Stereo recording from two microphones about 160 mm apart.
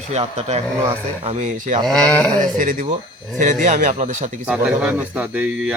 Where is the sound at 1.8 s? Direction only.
10° left (ahead or behind).